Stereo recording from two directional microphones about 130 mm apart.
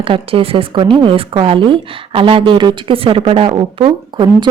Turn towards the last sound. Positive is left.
turn(degrees=-35)  # may be behind; listen again after turning